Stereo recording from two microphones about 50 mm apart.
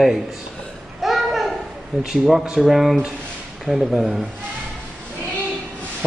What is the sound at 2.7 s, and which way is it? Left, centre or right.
A woman's voice, centre.